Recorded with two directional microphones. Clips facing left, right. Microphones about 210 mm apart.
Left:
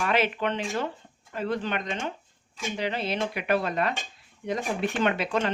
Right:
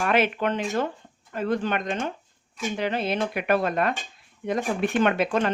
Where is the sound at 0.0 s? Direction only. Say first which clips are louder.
Right 3 dB; 50° right (ahead or behind).